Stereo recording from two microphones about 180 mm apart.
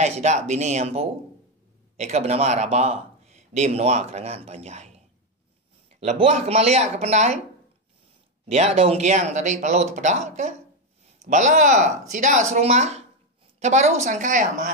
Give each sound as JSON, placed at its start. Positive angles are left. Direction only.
{"t": 0.0, "sound": "speech", "side_deg": -40}
{"t": 8.5, "sound": "speech", "side_deg": -35}